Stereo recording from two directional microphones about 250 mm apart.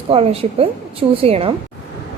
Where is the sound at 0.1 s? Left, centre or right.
Right.